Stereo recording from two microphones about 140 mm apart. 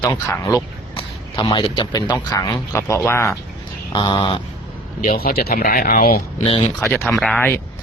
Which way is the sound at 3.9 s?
35° left (ahead or behind).